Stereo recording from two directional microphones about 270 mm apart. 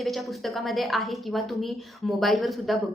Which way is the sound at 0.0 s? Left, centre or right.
Centre.